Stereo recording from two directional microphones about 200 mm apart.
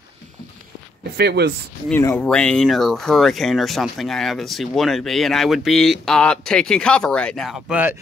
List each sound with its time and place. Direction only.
1.1 s speech: 55° right (ahead or behind)
1.9 s speech: 10° left (ahead or behind)